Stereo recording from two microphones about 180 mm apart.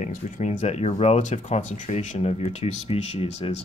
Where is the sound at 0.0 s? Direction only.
40° left (ahead or behind).